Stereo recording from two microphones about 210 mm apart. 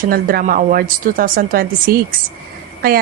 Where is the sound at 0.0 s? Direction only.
45° right (ahead or behind).